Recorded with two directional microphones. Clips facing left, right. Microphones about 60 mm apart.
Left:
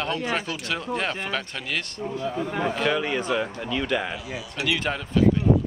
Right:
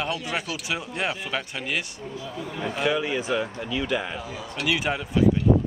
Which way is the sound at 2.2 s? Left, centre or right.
Left.